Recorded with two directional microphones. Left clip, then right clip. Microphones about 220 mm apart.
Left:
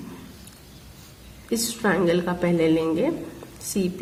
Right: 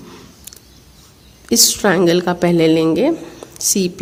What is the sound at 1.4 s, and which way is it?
A woman's voice, 45° right (ahead or behind).